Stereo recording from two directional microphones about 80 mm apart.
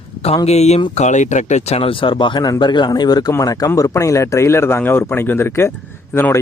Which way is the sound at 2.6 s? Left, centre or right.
Left.